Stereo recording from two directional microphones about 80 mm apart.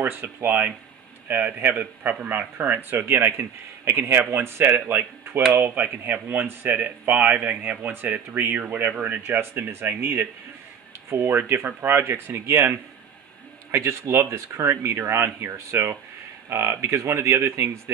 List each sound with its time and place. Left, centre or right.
0.0 s speech: right